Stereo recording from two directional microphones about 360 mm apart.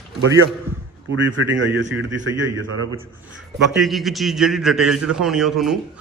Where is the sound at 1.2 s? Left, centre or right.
Right.